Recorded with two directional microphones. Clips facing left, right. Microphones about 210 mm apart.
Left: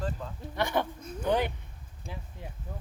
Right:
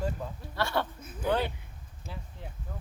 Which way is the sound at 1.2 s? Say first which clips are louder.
Left 1 dB; 15° left (ahead or behind).